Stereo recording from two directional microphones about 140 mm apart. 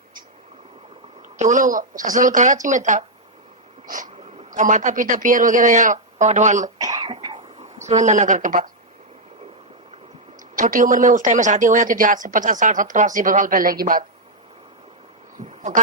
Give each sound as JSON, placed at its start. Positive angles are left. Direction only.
{"t": 1.4, "sound": "a man's voice", "side_deg": -65}
{"t": 3.8, "sound": "a sound", "side_deg": -75}
{"t": 4.5, "sound": "a man's voice", "side_deg": -65}
{"t": 6.7, "sound": "cough", "side_deg": -25}
{"t": 7.3, "sound": "speech", "side_deg": -55}
{"t": 10.5, "sound": "speech", "side_deg": -75}